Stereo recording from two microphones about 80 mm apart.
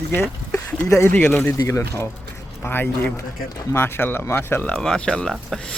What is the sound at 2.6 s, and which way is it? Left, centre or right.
Speech, left.